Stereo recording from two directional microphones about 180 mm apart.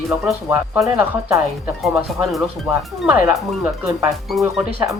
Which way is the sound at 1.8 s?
Centre (ahead or behind).